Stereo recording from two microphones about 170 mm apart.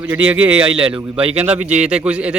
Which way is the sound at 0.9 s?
30° right (ahead or behind).